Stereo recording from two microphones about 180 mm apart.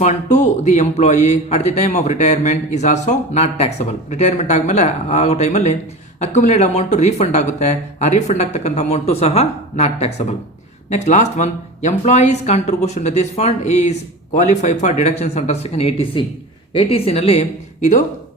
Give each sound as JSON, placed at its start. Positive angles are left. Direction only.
{"t": 0.0, "sound": "speech", "side_deg": 40}